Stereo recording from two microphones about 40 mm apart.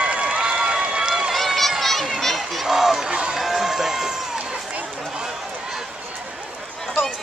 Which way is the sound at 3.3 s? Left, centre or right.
Centre.